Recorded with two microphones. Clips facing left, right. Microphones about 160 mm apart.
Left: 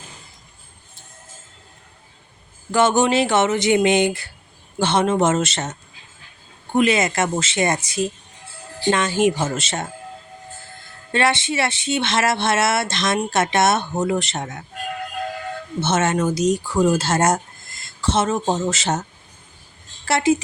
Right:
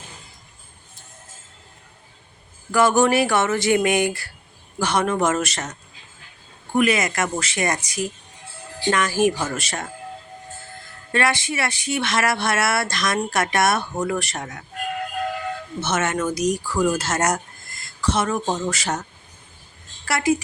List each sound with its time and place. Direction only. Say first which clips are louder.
2.7 s speech: even; 20° left (ahead or behind)
6.7 s speech: left 2 dB; 25° left (ahead or behind)
11.1 s speech: left 2 dB; 25° left (ahead or behind)
15.8 s speech: left 4 dB; 30° left (ahead or behind)
20.1 s speech: left 3 dB; 25° left (ahead or behind)